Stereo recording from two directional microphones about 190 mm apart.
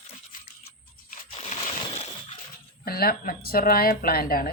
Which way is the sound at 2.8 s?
55° left (ahead or behind).